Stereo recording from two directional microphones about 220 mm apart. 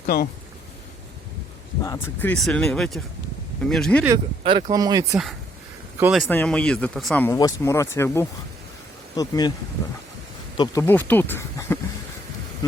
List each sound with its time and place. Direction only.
0.0 s speech: 45° left (ahead or behind)
1.8 s speech: 15° left (ahead or behind)
2.4 s speech: centre (ahead or behind)
4.0 s speech: 20° right (ahead or behind)
6.0 s speech: centre (ahead or behind); by 9.5 s 15° left (ahead or behind)
10.6 s speech: 10° left (ahead or behind)